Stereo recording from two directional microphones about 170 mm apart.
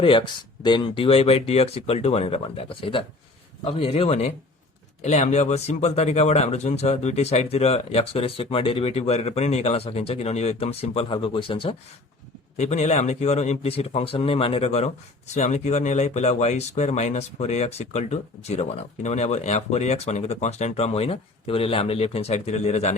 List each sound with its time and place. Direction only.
0.0 s speech: 30° left (ahead or behind)
12.5 s speech: 40° left (ahead or behind)